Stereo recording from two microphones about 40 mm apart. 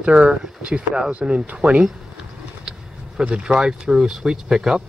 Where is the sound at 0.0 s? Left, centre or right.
Right.